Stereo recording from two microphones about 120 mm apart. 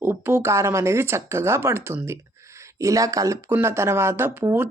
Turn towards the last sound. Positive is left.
turn(degrees=-20)  # may be behind; listen again after turning